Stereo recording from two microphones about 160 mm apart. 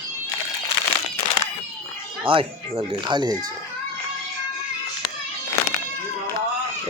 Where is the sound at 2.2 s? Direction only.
35° right (ahead or behind).